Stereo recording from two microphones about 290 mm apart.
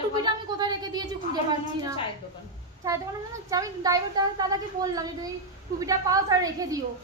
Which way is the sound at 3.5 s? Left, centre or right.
Centre.